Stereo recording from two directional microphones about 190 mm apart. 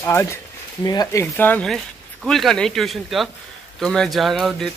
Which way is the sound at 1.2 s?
10° left (ahead or behind).